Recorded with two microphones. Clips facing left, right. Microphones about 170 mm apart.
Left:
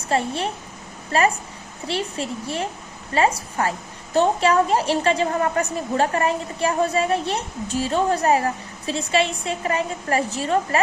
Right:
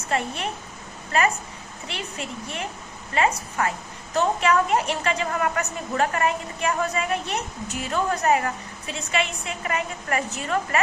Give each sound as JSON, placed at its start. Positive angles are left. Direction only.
{"t": 0.1, "sound": "a woman's voice", "side_deg": 30}